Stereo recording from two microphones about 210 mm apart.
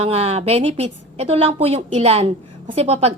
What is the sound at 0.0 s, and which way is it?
A woman's voice, 30° right (ahead or behind).